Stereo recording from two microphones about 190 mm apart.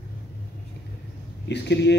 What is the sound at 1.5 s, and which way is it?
Speech, 65° left (ahead or behind).